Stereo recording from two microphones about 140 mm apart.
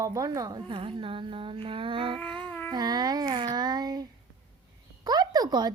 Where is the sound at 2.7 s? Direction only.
30° right (ahead or behind).